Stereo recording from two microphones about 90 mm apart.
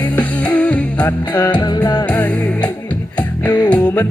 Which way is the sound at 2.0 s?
15° left (ahead or behind).